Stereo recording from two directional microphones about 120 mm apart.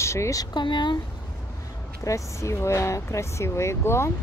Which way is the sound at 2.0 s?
25° left (ahead or behind).